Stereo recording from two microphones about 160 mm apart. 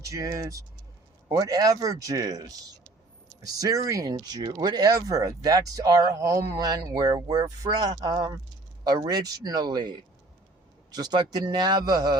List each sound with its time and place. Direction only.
0.0 s speech: 20° right (ahead or behind)
10.9 s speech: 25° right (ahead or behind)